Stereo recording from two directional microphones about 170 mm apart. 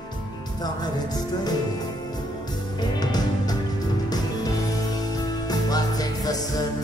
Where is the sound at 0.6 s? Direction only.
25° left (ahead or behind).